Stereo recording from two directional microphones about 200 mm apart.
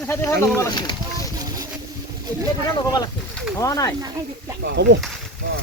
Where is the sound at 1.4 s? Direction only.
20° right (ahead or behind).